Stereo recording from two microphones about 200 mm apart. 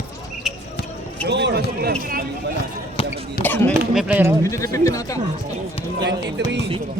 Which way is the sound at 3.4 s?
10° left (ahead or behind).